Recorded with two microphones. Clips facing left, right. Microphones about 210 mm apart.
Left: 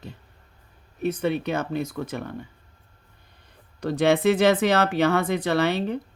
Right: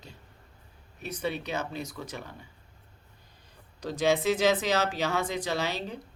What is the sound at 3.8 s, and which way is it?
Speech, 60° left (ahead or behind).